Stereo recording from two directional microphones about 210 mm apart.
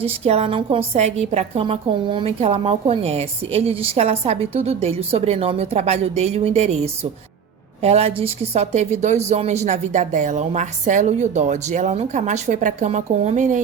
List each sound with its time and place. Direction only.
0.0 s a woman's voice: 30° right (ahead or behind)
7.8 s a woman's voice: 30° right (ahead or behind)